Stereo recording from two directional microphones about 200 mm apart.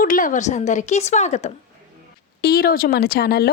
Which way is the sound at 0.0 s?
40° left (ahead or behind).